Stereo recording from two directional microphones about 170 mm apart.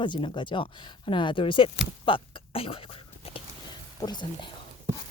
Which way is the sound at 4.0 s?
25° left (ahead or behind).